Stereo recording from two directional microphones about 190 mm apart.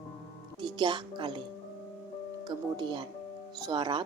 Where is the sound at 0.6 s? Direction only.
25° right (ahead or behind).